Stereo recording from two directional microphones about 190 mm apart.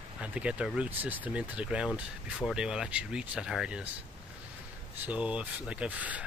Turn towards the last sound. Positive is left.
turn(degrees=-5)  # may be behind; listen again after turning